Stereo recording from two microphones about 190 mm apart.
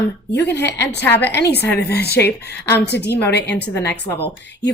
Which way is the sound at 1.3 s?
60° left (ahead or behind).